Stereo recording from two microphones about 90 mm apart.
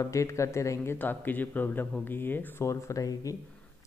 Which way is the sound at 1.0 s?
20° left (ahead or behind).